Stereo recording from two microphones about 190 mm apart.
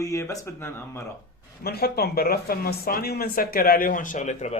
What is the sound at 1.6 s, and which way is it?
Speech, 55° left (ahead or behind).